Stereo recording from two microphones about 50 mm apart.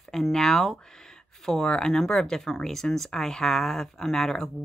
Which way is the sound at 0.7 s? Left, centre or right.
Centre.